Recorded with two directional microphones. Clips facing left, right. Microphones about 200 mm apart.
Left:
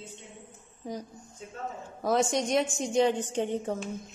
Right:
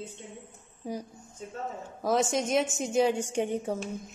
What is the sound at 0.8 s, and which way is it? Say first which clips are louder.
A woman's voice: right 1 dB; 10° right (ahead or behind).